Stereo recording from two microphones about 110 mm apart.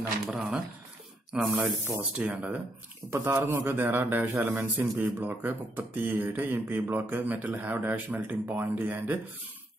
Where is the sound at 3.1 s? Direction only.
25° right (ahead or behind).